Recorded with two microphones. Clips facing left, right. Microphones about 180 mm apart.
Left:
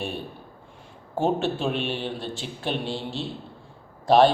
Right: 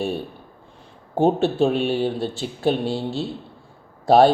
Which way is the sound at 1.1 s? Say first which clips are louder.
Right 5 dB; 35° right (ahead or behind).